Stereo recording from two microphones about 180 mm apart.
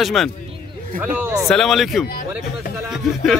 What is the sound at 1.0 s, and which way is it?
Speech, 10° right (ahead or behind).